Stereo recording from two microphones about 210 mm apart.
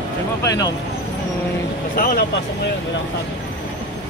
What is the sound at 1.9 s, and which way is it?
Speech, 45° left (ahead or behind).